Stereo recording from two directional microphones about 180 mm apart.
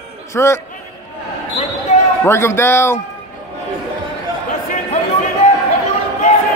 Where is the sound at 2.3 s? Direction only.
15° left (ahead or behind).